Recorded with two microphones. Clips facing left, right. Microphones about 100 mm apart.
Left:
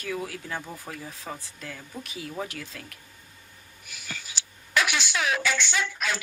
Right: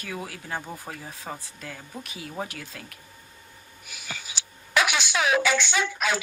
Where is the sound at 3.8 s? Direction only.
15° right (ahead or behind).